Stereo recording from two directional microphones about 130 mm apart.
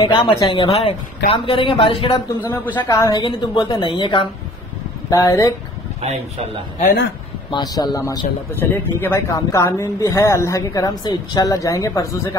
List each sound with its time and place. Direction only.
0.0 s a woman's voice: 45° left (ahead or behind)
2.4 s speech: 15° left (ahead or behind)
2.9 s a woman's voice: 30° left (ahead or behind)
5.1 s speech: 25° left (ahead or behind)
5.9 s speech: 55° right (ahead or behind)
7.5 s speech: 30° left (ahead or behind)
8.5 s speech: 15° left (ahead or behind)